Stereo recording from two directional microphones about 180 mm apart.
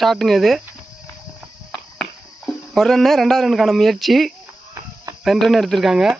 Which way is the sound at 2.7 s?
Centre (ahead or behind).